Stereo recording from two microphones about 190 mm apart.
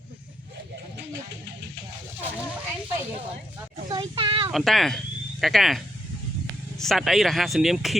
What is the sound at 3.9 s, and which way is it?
Speech, 25° right (ahead or behind).